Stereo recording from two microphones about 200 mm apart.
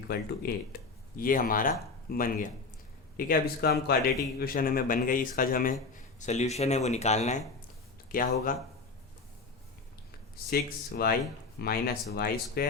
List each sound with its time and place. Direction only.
0.1 s speech: 50° left (ahead or behind)
8.1 s speech: 45° left (ahead or behind)
10.3 s speech: 50° left (ahead or behind)